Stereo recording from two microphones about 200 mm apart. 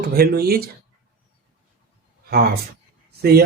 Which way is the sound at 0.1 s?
50° right (ahead or behind).